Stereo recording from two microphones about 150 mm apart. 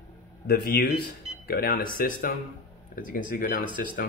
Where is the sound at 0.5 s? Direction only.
90° left.